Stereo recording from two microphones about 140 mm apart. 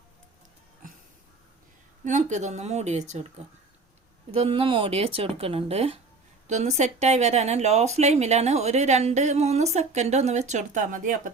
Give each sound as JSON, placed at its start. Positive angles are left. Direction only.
{"t": 2.0, "sound": "a woman's voice", "side_deg": -60}
{"t": 4.3, "sound": "speech", "side_deg": -40}